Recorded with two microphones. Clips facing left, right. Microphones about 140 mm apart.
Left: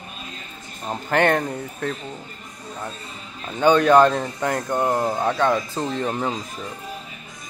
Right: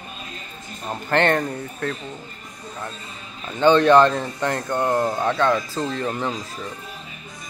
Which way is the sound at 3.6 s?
10° left (ahead or behind).